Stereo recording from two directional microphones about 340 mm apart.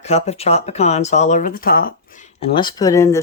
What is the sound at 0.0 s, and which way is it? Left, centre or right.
Speech, centre.